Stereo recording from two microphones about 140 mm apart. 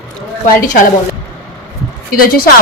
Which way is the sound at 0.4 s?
75° left (ahead or behind).